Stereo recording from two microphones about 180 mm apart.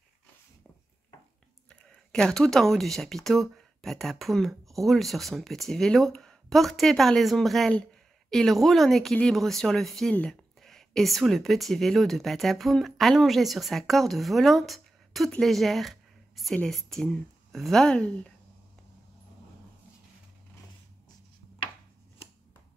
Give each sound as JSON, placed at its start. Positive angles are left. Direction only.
{"t": 1.7, "sound": "speech", "side_deg": 5}